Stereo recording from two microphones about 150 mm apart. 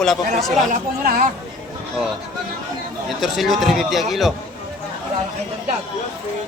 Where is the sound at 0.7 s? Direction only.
65° right (ahead or behind).